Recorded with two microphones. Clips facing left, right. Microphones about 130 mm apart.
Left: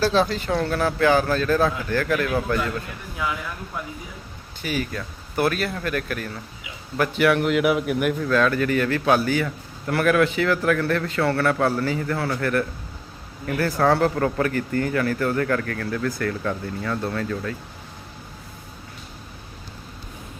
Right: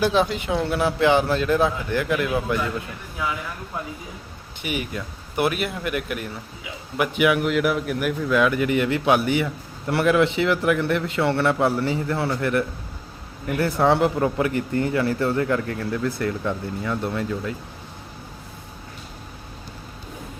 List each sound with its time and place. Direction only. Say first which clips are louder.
0.0 s speech: even; 15° right (ahead or behind)
4.6 s a man's voice: left 1 dB; 20° right (ahead or behind); by 8.3 s centre (ahead or behind)
8.3 s a man's voice: right 2 dB; 15° right (ahead or behind)